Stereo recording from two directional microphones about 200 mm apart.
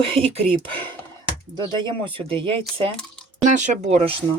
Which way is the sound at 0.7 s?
25° right (ahead or behind).